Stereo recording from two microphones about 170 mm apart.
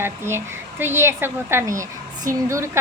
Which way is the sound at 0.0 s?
15° right (ahead or behind).